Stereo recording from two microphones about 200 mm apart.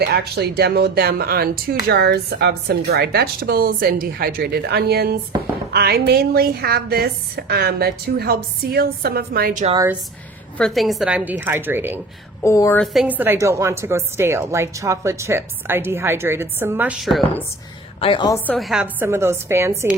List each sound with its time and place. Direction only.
0.0 s speech: 55° right (ahead or behind)
9.7 s a woman's voice: 15° right (ahead or behind)
10.6 s a woman's voice: centre (ahead or behind)
12.4 s a woman's voice: 15° left (ahead or behind)
12.8 s a woman's voice: centre (ahead or behind)
18.0 s a woman's voice: 25° left (ahead or behind)
18.4 s a woman's voice: centre (ahead or behind)